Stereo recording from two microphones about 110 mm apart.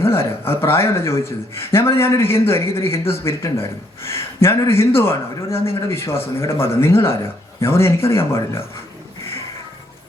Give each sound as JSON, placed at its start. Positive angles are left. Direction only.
{"t": 0.0, "sound": "a man's voice", "side_deg": 25}